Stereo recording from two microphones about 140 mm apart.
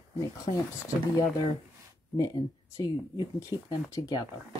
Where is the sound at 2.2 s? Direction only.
30° left (ahead or behind).